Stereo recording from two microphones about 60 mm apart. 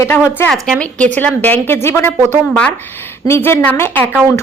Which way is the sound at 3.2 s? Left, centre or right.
Left.